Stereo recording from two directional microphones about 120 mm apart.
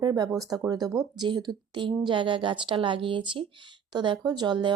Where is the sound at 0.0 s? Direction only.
30° right (ahead or behind).